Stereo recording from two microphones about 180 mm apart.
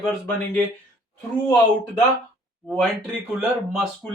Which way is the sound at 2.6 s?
Centre (ahead or behind).